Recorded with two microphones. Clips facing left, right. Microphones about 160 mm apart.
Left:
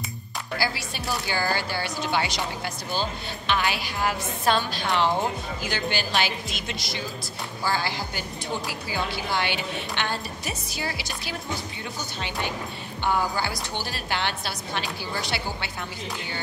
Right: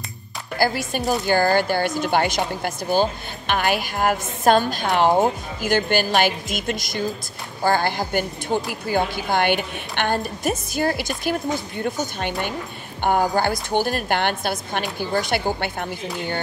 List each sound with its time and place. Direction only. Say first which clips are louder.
0.6 s speech: right 9 dB; 50° right (ahead or behind)